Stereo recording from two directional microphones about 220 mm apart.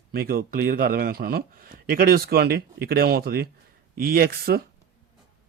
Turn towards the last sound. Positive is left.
turn(degrees=-45)  # may be behind; listen again after turning